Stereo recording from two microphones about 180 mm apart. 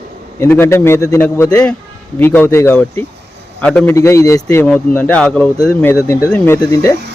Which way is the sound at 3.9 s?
15° left (ahead or behind).